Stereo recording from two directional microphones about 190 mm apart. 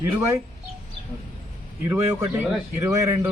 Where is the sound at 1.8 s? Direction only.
10° right (ahead or behind).